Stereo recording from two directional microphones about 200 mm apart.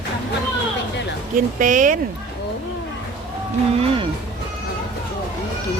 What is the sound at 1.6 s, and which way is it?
Speech, 40° right (ahead or behind).